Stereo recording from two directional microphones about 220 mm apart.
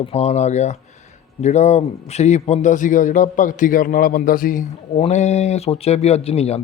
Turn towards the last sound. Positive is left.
turn(degrees=30)  # may be behind; listen again after turning